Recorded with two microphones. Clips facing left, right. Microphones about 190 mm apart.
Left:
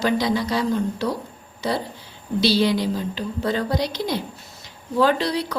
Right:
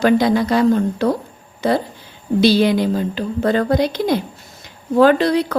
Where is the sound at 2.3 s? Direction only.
50° right (ahead or behind).